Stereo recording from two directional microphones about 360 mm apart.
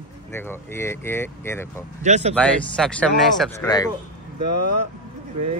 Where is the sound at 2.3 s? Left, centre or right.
Centre.